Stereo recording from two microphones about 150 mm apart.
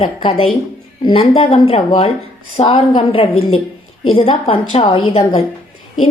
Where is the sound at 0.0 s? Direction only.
35° left (ahead or behind).